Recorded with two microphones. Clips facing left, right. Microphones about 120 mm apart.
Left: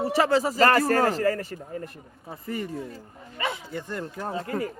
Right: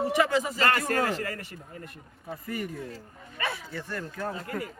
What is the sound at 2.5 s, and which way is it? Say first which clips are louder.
Speech: left 3 dB; 30° left (ahead or behind).